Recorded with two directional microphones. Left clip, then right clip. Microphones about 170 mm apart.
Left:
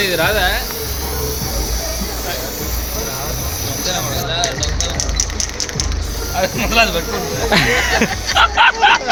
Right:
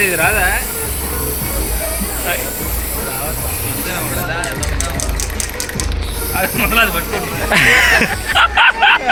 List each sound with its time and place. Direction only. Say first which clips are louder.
0.0 s music: right 1 dB; 90° left
6.4 s speech: right 1 dB; 90° left
7.5 s speech: right 5 dB; centre (ahead or behind)